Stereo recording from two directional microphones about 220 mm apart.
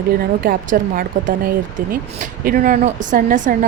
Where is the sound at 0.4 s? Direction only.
40° right (ahead or behind).